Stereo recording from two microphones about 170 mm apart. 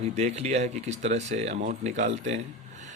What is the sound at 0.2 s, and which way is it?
Speech, 40° right (ahead or behind).